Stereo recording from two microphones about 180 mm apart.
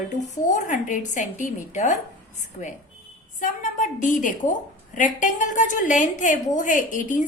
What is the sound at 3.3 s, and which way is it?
A woman's voice, 45° left (ahead or behind).